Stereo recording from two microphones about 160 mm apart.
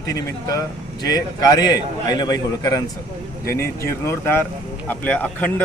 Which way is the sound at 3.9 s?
15° left (ahead or behind).